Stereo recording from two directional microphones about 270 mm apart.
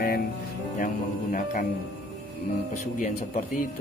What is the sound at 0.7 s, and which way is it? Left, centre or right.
Speech, left.